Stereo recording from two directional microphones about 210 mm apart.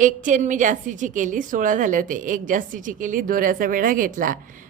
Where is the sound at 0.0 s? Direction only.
35° right (ahead or behind).